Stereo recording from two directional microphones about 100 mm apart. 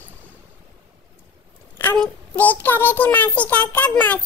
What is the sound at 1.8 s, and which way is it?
Child singing, 20° left (ahead or behind).